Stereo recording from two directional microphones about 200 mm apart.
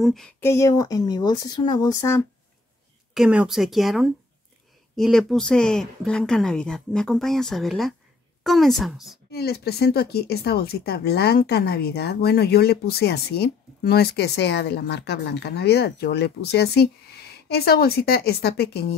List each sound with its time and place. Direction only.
0.0 s speech: centre (ahead or behind)
0.4 s speech: 15° left (ahead or behind)
3.2 s speech: 5° right (ahead or behind)
9.3 s speech: 50° left (ahead or behind)